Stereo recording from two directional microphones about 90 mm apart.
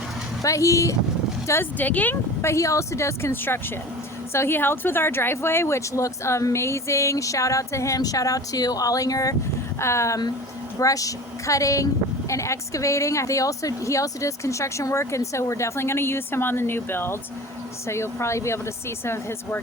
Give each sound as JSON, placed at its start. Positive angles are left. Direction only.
{"t": 0.4, "sound": "speech", "side_deg": 35}
{"t": 1.8, "sound": "speech", "side_deg": 20}
{"t": 2.4, "sound": "speech", "side_deg": 35}